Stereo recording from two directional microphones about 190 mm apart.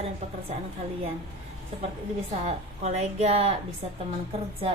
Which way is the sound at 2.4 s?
35° right (ahead or behind).